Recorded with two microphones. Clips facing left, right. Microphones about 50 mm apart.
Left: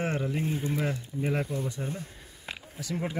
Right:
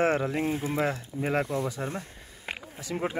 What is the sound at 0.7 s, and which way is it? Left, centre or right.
Speech, right.